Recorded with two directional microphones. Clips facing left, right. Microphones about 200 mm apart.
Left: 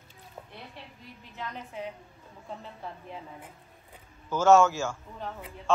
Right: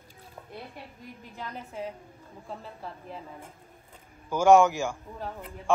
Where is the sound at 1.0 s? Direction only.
45° right (ahead or behind).